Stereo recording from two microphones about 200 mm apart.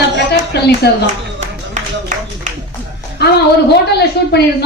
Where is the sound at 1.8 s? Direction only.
35° right (ahead or behind).